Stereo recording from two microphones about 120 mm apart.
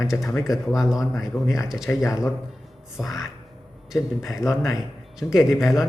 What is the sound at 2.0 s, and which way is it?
Speech, 25° left (ahead or behind).